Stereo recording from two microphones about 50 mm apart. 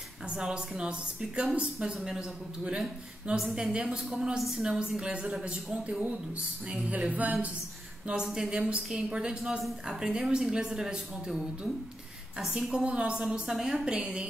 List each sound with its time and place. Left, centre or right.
0.3 s a woman's voice: centre; by 7.3 s right
8.5 s a woman's voice: centre
12.8 s a woman's voice: centre
13.2 s a woman's voice: centre